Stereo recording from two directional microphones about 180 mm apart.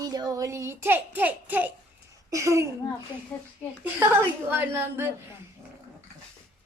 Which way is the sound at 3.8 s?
10° right (ahead or behind).